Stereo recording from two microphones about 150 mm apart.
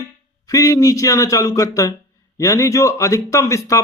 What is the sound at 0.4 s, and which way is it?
Speech, 20° left (ahead or behind).